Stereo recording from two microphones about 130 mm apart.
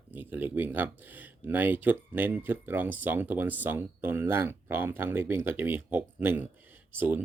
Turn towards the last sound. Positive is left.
turn(degrees=-15)  # may be behind; listen again after turning